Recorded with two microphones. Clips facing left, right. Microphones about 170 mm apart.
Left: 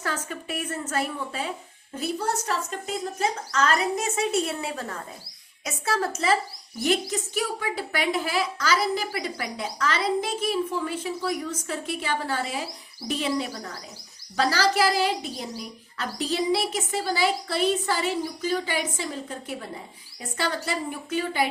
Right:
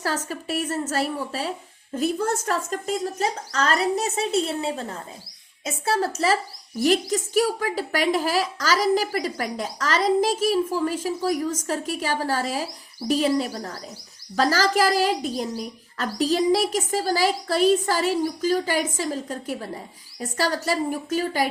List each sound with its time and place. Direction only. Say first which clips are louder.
0.3 s a woman's voice: right 5 dB; 35° right (ahead or behind)